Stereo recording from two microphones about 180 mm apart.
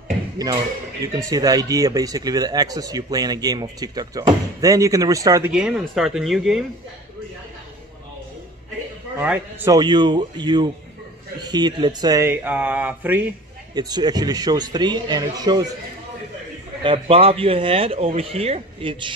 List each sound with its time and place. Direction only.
1.0 s speech: 20° right (ahead or behind)
5.5 s speech: 5° right (ahead or behind)
9.2 s speech: 10° right (ahead or behind)
9.7 s speech: 25° right (ahead or behind)
13.7 s speech: 20° right (ahead or behind)
16.8 s speech: 30° right (ahead or behind)